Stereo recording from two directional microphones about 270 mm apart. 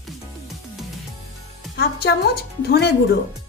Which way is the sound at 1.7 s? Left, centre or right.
Left.